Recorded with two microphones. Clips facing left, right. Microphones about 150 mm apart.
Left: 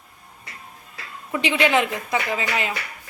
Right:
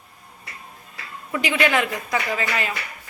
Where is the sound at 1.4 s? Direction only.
25° left (ahead or behind).